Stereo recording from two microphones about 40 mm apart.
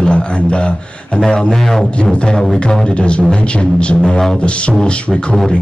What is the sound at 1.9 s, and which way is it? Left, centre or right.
Beatboxing, left.